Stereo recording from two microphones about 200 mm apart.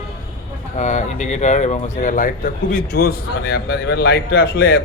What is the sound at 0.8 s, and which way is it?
A man's voice, 35° left (ahead or behind).